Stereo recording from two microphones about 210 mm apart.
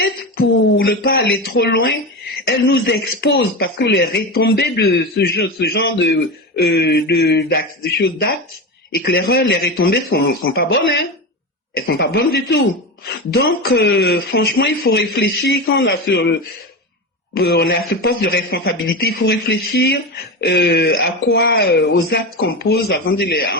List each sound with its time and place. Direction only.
0.0 s speech: 45° left (ahead or behind)
9.0 s speech: 50° left (ahead or behind)
11.7 s speech: 50° left (ahead or behind)
13.7 s speech: 55° left (ahead or behind)
17.3 s speech: 50° left (ahead or behind)